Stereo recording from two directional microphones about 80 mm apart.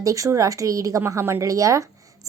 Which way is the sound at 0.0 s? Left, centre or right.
Right.